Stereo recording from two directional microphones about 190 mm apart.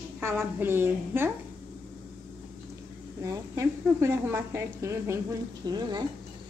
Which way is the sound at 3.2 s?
15° right (ahead or behind).